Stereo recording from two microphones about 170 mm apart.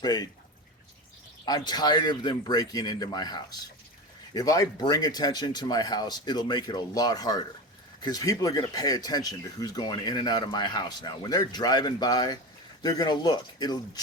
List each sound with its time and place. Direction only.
0.0 s speech: 25° left (ahead or behind)
1.5 s speech: 25° left (ahead or behind)